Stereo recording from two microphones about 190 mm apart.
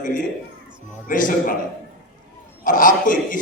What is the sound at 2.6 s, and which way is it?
Speech, 45° left (ahead or behind).